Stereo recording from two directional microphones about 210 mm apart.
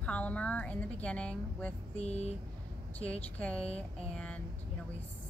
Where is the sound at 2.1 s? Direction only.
30° left (ahead or behind).